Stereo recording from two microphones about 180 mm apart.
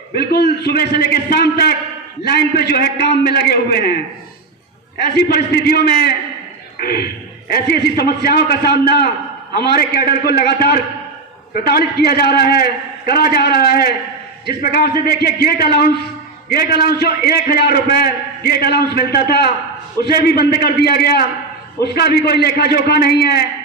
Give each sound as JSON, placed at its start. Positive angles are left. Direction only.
{"t": 0.1, "sound": "a man's voice", "side_deg": 65}
{"t": 5.0, "sound": "a man's voice", "side_deg": 60}
{"t": 6.8, "sound": "a man's voice", "side_deg": 60}